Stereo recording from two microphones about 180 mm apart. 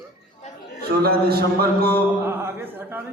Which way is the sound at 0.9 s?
60° right (ahead or behind).